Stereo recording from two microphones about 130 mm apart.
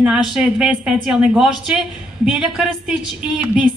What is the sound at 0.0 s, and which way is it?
Speech, 5° right (ahead or behind).